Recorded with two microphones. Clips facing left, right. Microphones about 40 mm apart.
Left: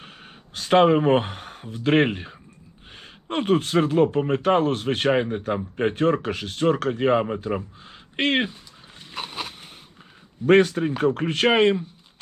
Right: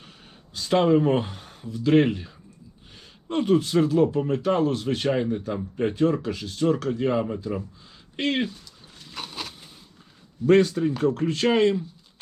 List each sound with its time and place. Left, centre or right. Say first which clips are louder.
0.5 s speech: left 3 dB; left
9.1 s a sound: left 3 dB; left
10.4 s speech: left 1 dB; left